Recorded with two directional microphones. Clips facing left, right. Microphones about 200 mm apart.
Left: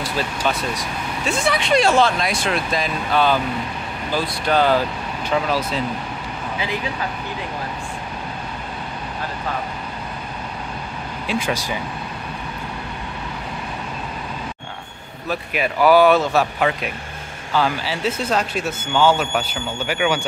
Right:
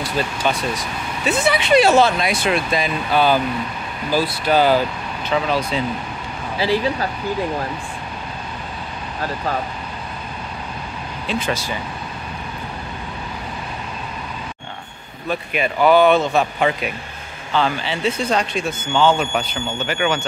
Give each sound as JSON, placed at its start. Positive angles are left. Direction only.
{"t": 0.5, "sound": "speech", "side_deg": 0}
{"t": 6.6, "sound": "speech", "side_deg": -35}
{"t": 11.2, "sound": "speech", "side_deg": 10}
{"t": 15.2, "sound": "speech", "side_deg": 5}